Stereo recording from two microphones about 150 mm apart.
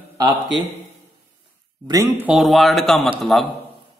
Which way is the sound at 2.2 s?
5° right (ahead or behind).